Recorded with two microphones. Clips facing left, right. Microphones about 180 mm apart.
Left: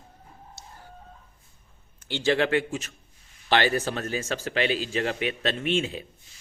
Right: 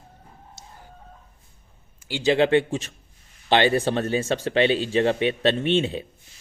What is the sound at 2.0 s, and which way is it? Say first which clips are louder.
A man's voice: right 4 dB; 10° right (ahead or behind).